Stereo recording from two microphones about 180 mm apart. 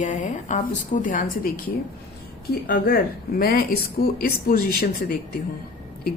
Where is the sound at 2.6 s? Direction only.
55° left (ahead or behind).